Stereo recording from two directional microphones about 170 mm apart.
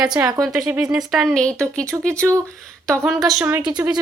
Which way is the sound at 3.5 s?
10° right (ahead or behind).